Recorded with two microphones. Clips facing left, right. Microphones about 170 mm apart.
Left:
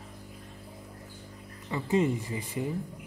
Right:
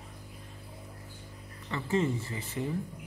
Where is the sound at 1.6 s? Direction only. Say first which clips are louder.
Left 3 dB; 15° left (ahead or behind).